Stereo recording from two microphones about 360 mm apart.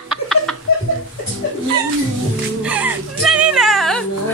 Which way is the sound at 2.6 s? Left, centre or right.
Centre.